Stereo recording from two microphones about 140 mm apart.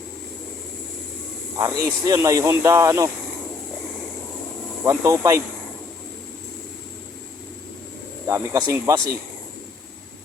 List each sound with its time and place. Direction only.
1.5 s speech: 25° right (ahead or behind)
4.9 s speech: 20° right (ahead or behind)
8.3 s speech: 20° right (ahead or behind)